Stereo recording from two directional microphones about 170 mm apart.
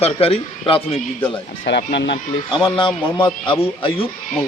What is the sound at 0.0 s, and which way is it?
A man's voice, 35° left (ahead or behind).